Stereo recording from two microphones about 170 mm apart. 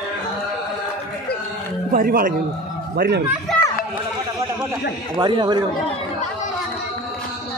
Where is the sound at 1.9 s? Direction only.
55° right (ahead or behind).